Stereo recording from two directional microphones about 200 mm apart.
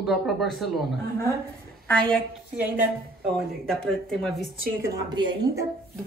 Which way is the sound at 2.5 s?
10° right (ahead or behind).